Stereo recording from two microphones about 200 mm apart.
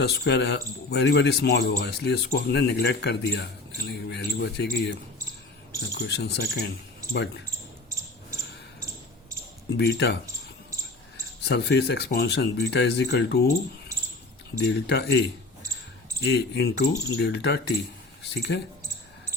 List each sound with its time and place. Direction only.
0.0 s speech: 55° left (ahead or behind)
9.7 s speech: 55° left (ahead or behind)
11.4 s speech: 55° left (ahead or behind)
14.6 s speech: 60° left (ahead or behind)
16.2 s speech: 55° left (ahead or behind)
18.2 s a sound: 55° left (ahead or behind)